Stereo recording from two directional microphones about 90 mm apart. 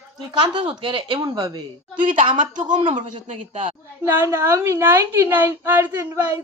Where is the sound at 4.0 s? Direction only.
25° right (ahead or behind).